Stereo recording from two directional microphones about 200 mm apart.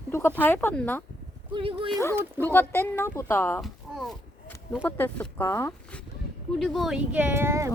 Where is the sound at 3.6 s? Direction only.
Centre (ahead or behind).